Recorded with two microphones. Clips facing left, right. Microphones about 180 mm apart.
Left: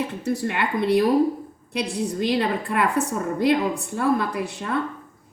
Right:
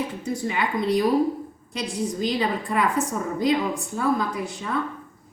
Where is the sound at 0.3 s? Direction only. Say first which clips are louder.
Left 2 dB; 65° left (ahead or behind).